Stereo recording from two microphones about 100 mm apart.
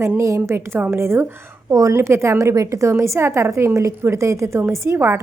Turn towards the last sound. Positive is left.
turn(degrees=-25)  # may be behind; listen again after turning